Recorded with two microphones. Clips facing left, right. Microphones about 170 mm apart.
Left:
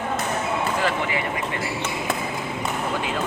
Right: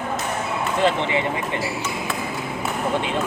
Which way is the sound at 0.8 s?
25° right (ahead or behind).